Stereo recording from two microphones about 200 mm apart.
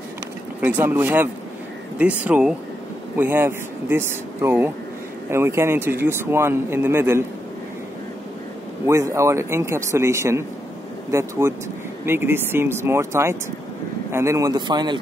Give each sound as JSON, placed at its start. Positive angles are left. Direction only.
{"t": 0.6, "sound": "speech", "side_deg": -10}
{"t": 8.8, "sound": "a man's voice", "side_deg": -15}